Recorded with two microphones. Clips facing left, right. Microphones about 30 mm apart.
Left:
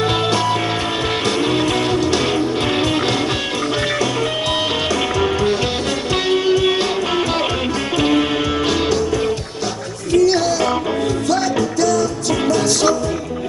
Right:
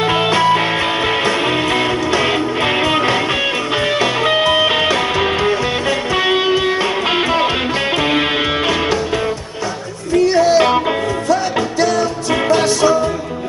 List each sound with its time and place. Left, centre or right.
0.0 s music: right
4.0 s music: right
10.4 s music: right
11.8 s music: right